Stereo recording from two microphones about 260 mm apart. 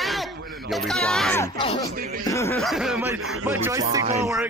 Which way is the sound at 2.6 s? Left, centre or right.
Centre.